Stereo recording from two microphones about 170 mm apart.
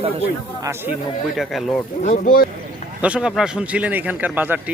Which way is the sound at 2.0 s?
50° left (ahead or behind).